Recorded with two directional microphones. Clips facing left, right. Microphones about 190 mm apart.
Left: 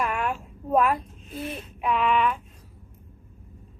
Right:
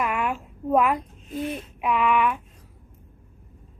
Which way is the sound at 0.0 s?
15° right (ahead or behind).